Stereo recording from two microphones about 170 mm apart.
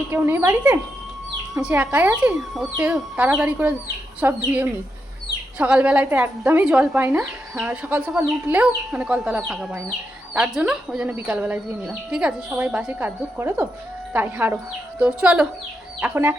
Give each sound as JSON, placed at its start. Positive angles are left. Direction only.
{"t": 0.1, "sound": "speech", "side_deg": -15}
{"t": 5.5, "sound": "speech", "side_deg": -5}